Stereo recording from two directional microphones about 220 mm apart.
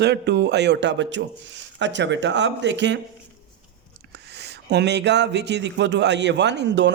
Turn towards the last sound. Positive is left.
turn(degrees=-50)  # may be behind; listen again after turning